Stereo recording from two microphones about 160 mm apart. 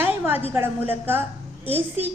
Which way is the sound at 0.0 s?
15° right (ahead or behind).